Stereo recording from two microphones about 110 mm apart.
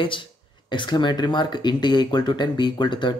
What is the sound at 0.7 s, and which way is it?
Speech, 45° left (ahead or behind).